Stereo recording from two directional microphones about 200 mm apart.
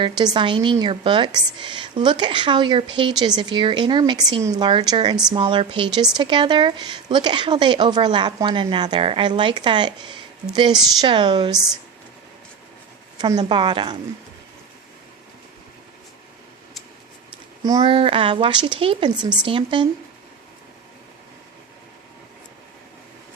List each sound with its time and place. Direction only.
0.3 s a woman's voice: 25° right (ahead or behind)
11.5 s speech: centre (ahead or behind)
13.1 s a woman's voice: 20° right (ahead or behind)
17.6 s a woman's voice: 20° right (ahead or behind)